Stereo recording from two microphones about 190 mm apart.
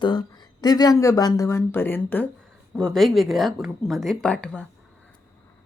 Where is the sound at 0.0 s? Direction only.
25° left (ahead or behind); by 4.6 s 5° left (ahead or behind).